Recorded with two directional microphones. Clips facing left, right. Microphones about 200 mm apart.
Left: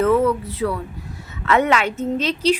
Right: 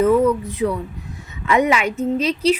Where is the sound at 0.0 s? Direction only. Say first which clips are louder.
Right 2 dB; 15° right (ahead or behind).